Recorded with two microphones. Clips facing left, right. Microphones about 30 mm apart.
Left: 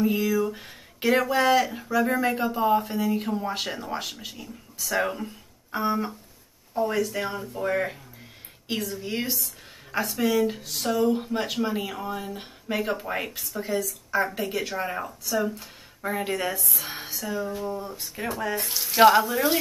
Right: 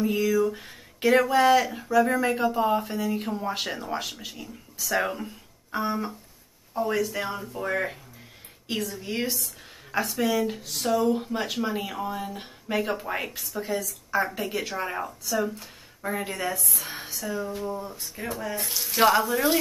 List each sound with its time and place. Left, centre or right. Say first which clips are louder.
0.0 s speech: even; centre
16.5 s speech: even; centre
16.8 s speech: even; centre
18.0 s speech: left 2 dB; centre
18.4 s speech: left 4 dB; left
18.7 s speech: left 4 dB; centre